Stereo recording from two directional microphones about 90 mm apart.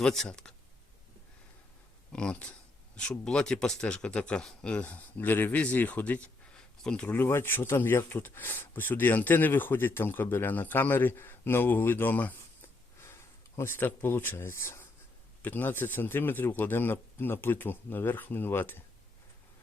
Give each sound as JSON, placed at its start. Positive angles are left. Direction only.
{"t": 0.0, "sound": "speech", "side_deg": 10}
{"t": 2.1, "sound": "speech", "side_deg": 10}
{"t": 7.1, "sound": "speech", "side_deg": 25}